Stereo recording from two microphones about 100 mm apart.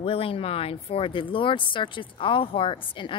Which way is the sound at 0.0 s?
70° left (ahead or behind).